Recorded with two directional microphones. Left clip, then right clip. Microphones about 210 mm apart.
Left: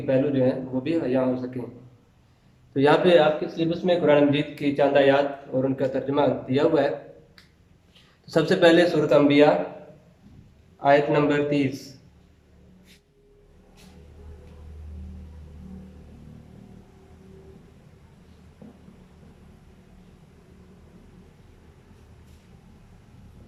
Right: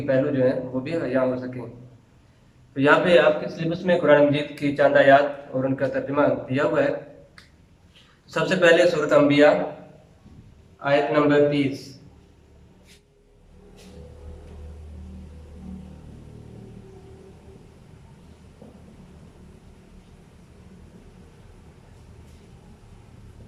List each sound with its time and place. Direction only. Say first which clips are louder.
0.0 s a man's voice: right 1 dB; 15° left (ahead or behind)
2.7 s a man's voice: right 1 dB; 25° left (ahead or behind)
8.3 s a man's voice: even; 25° left (ahead or behind)
10.8 s a man's voice: left 1 dB; 30° left (ahead or behind)